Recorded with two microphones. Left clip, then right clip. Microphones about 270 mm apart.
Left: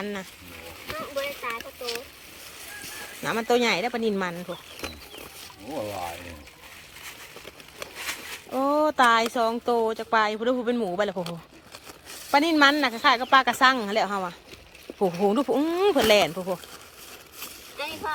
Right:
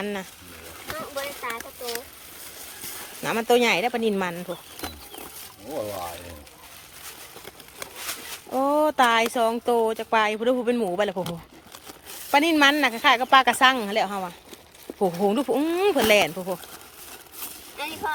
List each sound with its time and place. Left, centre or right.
0.0 s a woman's voice: centre
0.9 s a sound: centre
3.2 s a woman's voice: centre
8.5 s a woman's voice: centre
12.3 s a woman's voice: centre
17.4 s a sound: right